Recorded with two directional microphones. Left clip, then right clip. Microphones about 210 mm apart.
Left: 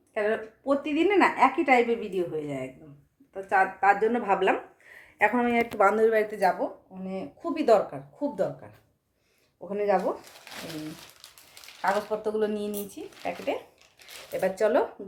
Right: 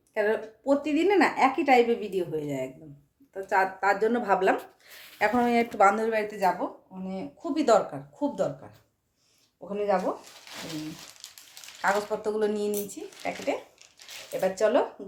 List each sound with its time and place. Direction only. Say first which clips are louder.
0.1 s speech: right 1 dB; 10° right (ahead or behind)
11.8 s speech: even; 15° right (ahead or behind)
14.3 s speech: even; 5° right (ahead or behind)